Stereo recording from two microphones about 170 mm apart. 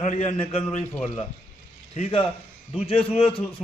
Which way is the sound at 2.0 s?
35° left (ahead or behind).